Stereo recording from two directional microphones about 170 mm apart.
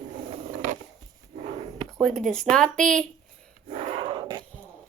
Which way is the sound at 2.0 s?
Centre (ahead or behind).